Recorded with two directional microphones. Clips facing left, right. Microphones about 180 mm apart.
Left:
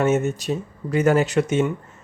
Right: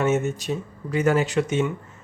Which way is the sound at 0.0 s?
40° left (ahead or behind).